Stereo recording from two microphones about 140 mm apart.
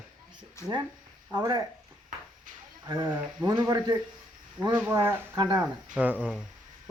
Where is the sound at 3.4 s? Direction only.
30° right (ahead or behind).